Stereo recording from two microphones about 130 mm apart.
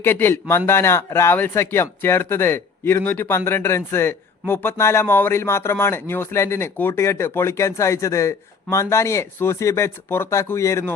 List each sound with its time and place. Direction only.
0.0 s speech: 15° left (ahead or behind)